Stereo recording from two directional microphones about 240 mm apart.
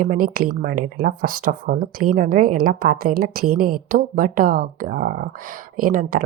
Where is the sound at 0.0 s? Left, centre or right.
Right.